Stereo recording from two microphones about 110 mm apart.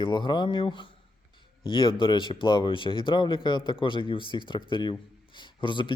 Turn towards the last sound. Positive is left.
turn(degrees=50)  # may be behind; listen again after turning